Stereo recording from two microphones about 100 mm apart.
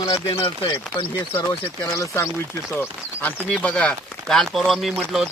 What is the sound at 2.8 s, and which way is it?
Speech, 15° left (ahead or behind).